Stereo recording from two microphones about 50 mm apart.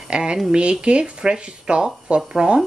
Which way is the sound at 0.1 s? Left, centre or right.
Centre.